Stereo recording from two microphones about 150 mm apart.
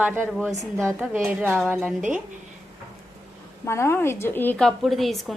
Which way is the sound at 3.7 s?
20° left (ahead or behind).